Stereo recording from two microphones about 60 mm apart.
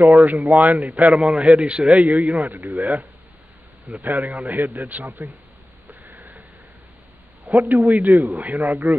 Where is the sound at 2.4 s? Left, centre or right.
Right.